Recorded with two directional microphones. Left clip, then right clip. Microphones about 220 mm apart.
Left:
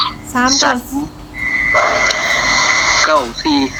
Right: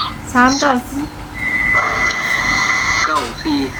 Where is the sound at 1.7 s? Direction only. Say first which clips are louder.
Left 4 dB; 50° left (ahead or behind).